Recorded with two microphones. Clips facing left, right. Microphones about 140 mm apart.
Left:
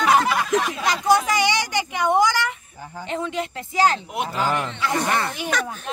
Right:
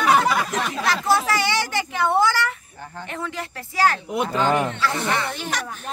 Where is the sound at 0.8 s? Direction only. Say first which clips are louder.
Right 1 dB; 15° left (ahead or behind).